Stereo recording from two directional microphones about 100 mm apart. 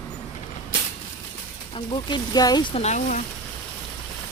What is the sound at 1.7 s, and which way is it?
Speech, 55° left (ahead or behind).